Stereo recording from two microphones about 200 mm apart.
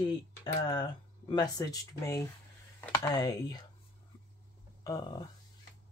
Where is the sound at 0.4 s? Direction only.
20° left (ahead or behind).